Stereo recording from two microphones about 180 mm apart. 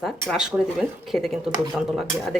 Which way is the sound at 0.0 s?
Centre (ahead or behind).